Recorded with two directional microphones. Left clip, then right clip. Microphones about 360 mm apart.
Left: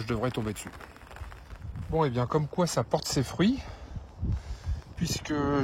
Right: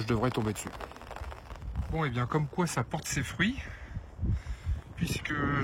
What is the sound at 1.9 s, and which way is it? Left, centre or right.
Speech, centre.